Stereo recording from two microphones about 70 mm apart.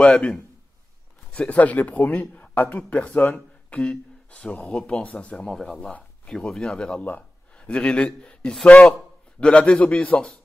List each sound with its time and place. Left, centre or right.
0.0 s speech: left
1.3 s speech: centre
5.8 s speech: centre